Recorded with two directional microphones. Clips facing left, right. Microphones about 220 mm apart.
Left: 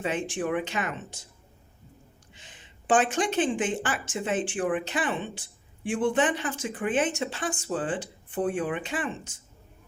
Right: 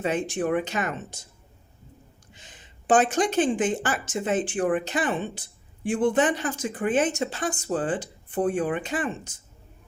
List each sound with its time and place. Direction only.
0.0 s speech: 40° right (ahead or behind)
2.3 s speech: 40° right (ahead or behind)